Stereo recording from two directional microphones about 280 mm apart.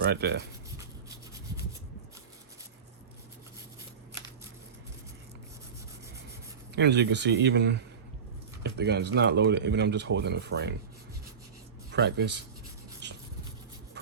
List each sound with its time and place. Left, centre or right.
0.0 s speech: right
6.7 s speech: right
11.9 s speech: right
13.0 s a sound: right